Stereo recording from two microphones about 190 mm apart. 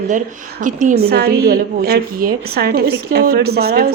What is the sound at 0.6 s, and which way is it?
A woman's voice, 45° right (ahead or behind).